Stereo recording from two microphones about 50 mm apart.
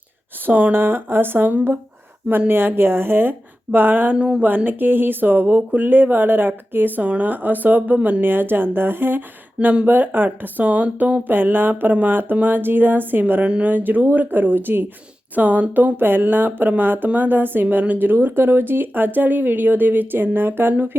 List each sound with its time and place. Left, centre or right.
0.4 s a woman's voice: right
4.2 s speech: right
4.4 s a woman's voice: right
13.4 s speech: right
13.7 s speech: right
15.4 s speech: right